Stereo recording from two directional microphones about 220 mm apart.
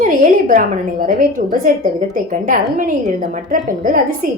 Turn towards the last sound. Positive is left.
turn(degrees=-40)  # may be behind; listen again after turning